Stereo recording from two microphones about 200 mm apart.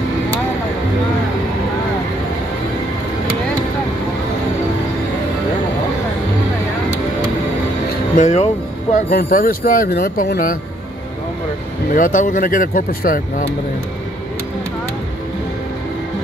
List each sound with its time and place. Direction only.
8.2 s speech: 35° left (ahead or behind)
11.9 s speech: 40° left (ahead or behind)